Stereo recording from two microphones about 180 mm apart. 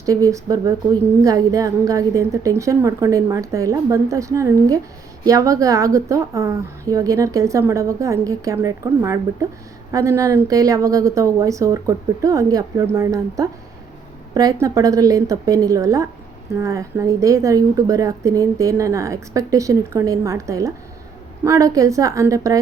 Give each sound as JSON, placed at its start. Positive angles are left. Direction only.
{"t": 0.0, "sound": "a woman's voice", "side_deg": -20}